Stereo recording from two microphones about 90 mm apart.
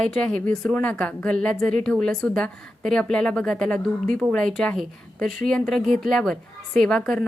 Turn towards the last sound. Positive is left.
turn(degrees=5)  # may be behind; listen again after turning